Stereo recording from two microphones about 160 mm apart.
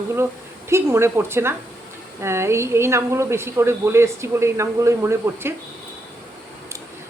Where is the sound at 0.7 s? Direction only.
15° right (ahead or behind).